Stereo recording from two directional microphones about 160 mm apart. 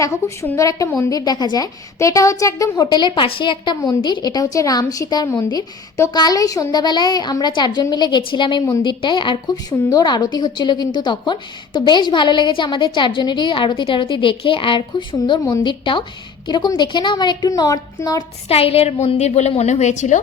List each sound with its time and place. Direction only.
0.0 s a woman's voice: 20° left (ahead or behind)
18.4 s a woman's voice: 40° left (ahead or behind)